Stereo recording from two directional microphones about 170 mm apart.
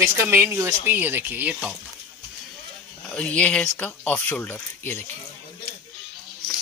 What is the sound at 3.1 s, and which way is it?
Speech, 5° left (ahead or behind).